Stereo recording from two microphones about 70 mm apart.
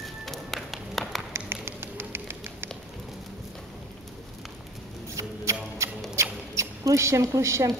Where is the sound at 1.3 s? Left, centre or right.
Right.